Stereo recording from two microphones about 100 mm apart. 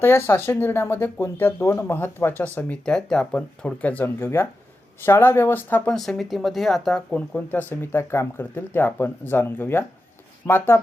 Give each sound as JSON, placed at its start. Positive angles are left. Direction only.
{"t": 0.3, "sound": "speech", "side_deg": 20}
{"t": 5.9, "sound": "speech", "side_deg": 0}